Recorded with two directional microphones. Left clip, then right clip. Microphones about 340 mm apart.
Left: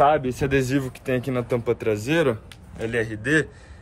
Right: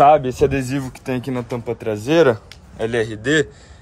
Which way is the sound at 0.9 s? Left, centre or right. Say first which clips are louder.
Right 1 dB; centre.